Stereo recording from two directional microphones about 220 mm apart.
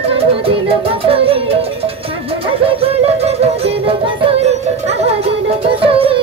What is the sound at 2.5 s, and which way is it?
Music, 25° right (ahead or behind).